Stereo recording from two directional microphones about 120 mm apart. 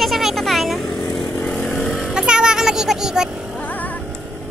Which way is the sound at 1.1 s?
35° left (ahead or behind).